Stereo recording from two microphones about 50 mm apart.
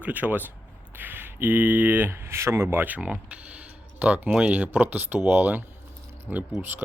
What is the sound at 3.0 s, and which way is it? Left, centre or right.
Speech, right.